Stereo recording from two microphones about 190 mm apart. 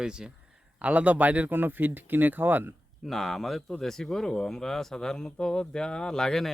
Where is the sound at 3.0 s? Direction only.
Centre (ahead or behind).